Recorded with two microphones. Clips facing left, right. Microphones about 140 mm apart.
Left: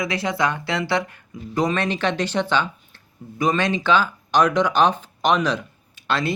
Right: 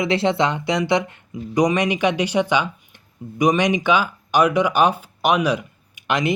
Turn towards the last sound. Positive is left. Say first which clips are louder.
# right 2 dB
turn(degrees=-15)  # may be behind; listen again after turning